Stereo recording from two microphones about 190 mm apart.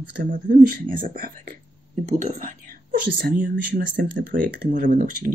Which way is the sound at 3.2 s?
55° right (ahead or behind).